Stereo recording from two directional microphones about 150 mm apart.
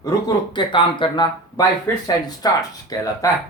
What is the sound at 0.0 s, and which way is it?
Speech, 30° left (ahead or behind).